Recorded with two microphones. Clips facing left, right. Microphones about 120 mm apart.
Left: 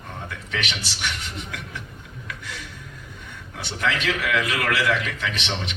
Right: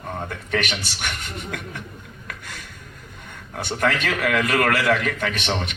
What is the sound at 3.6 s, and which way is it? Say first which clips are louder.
A man's voice: right 3 dB; 50° right (ahead or behind).